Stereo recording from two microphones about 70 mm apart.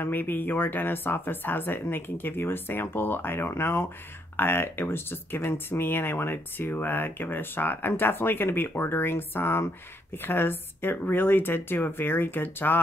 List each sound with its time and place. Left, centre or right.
0.0 s speech: left